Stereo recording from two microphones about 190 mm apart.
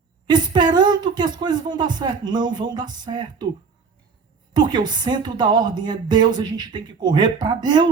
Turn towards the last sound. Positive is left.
turn(degrees=-20)  # may be behind; listen again after turning